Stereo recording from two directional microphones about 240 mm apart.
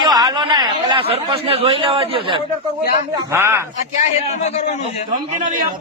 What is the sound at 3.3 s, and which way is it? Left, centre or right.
Speech, centre.